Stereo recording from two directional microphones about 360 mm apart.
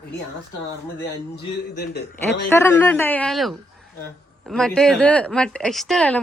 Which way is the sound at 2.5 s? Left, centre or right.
Centre.